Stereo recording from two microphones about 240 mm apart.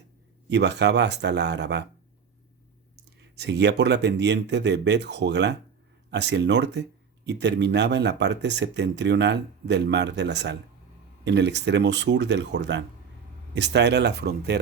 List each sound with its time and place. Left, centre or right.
0.4 s speech: right
2.9 s speech: right